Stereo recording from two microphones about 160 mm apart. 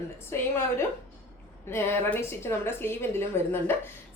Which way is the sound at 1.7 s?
15° left (ahead or behind).